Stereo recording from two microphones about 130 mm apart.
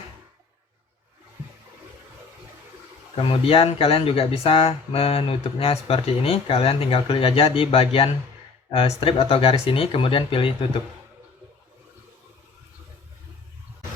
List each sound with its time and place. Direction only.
3.2 s speech: 45° left (ahead or behind)